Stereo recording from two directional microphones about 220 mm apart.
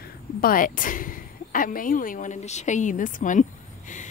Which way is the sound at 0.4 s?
40° left (ahead or behind).